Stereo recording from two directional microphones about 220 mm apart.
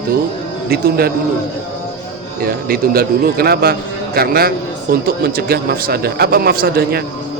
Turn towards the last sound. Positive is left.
turn(degrees=-40)  # may be behind; listen again after turning